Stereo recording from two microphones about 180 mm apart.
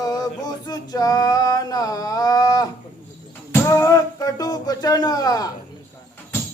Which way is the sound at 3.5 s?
15° left (ahead or behind).